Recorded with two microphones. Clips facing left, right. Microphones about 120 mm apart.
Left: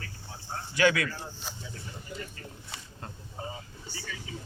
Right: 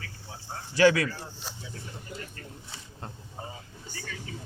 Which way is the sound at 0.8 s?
35° right (ahead or behind).